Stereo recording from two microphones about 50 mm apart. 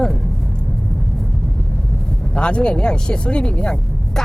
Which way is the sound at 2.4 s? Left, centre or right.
Centre.